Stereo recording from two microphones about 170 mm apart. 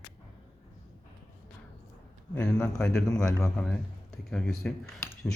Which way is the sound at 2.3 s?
5° left (ahead or behind).